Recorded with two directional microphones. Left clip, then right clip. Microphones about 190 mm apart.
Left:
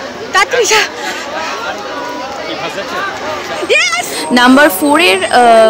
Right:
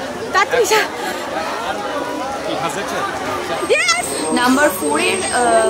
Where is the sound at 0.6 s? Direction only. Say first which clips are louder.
Left 4 dB; centre (ahead or behind).